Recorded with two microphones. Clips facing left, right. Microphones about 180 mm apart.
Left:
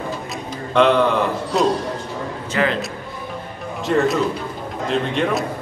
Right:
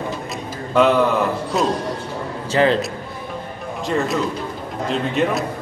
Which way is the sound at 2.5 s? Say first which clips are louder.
Right 4 dB; 30° right (ahead or behind).